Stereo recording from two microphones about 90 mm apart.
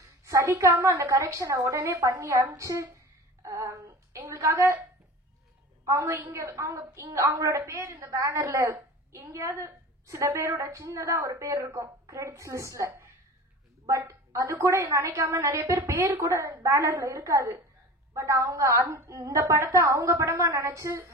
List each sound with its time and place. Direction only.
0.2 s a woman's voice: 35° right (ahead or behind)
5.9 s a woman's voice: 35° right (ahead or behind)